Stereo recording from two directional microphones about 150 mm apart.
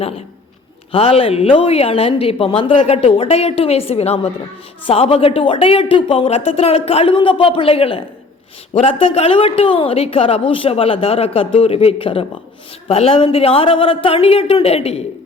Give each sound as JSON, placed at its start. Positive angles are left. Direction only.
{"t": 0.9, "sound": "a woman's voice", "side_deg": 40}